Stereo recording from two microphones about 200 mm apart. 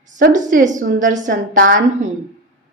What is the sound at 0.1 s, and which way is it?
A woman's voice, 40° right (ahead or behind).